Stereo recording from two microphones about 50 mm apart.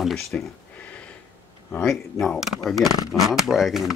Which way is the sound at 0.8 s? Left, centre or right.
Left.